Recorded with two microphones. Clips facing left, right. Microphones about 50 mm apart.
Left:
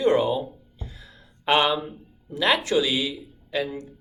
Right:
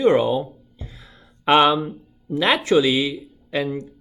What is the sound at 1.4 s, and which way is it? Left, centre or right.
Speech, right.